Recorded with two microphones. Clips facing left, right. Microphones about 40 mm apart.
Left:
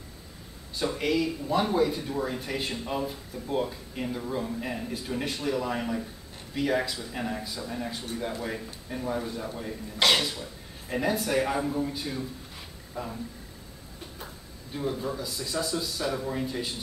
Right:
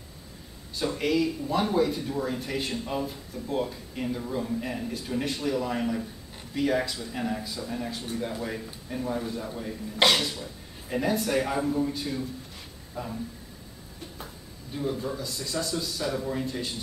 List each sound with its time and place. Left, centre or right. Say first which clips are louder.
0.7 s speech: right 1 dB; centre
14.2 s speech: even; centre